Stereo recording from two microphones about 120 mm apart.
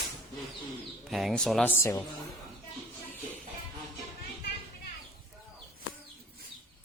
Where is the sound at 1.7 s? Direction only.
25° left (ahead or behind).